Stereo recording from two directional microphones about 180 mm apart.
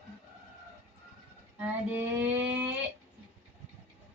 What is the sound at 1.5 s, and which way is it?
Female singing, 10° right (ahead or behind).